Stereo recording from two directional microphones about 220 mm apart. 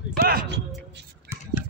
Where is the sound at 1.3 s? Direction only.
10° right (ahead or behind).